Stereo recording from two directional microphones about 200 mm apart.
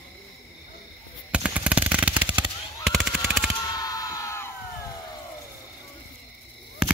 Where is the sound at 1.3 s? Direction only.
5° right (ahead or behind).